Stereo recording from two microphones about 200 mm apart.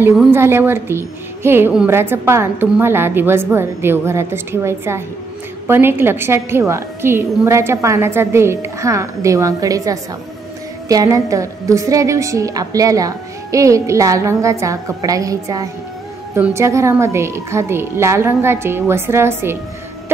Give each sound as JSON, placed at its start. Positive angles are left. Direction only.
{"t": 0.3, "sound": "a woman's voice", "side_deg": -10}